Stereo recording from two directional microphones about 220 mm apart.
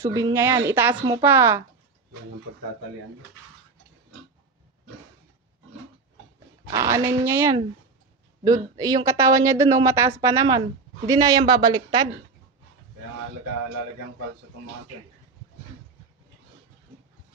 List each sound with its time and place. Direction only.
0.0 s a woman's voice: 15° right (ahead or behind)
6.7 s a woman's voice: 15° right (ahead or behind)